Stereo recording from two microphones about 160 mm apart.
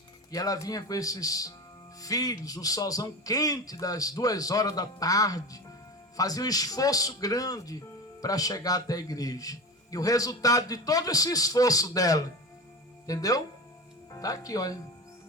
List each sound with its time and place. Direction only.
0.3 s speech: 20° left (ahead or behind)